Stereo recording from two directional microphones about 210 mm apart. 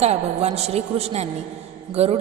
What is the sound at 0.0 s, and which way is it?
A woman's voice, 30° right (ahead or behind).